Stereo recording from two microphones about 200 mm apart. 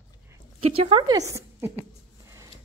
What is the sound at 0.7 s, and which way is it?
A woman's voice, 30° right (ahead or behind).